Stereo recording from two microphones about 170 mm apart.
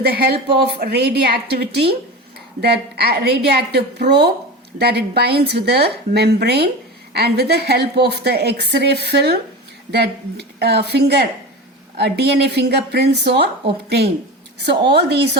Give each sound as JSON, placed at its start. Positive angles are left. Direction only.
{"t": 0.1, "sound": "a woman's voice", "side_deg": -70}